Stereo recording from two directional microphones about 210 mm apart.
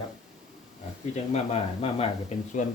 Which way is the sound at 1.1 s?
30° left (ahead or behind).